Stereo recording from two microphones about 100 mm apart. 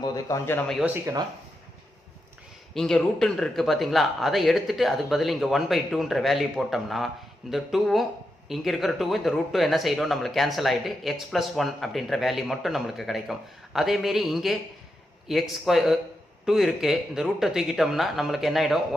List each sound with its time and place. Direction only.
0.0 s speech: 35° left (ahead or behind)
1.1 s speech: 30° right (ahead or behind)
2.7 s speech: 5° left (ahead or behind)